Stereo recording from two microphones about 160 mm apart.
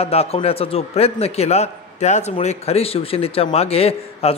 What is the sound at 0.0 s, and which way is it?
A man's voice, 40° left (ahead or behind).